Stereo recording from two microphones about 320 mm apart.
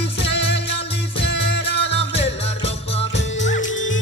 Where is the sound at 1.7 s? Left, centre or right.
Centre.